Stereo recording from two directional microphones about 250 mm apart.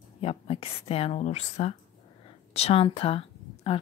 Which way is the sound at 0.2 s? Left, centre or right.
Left.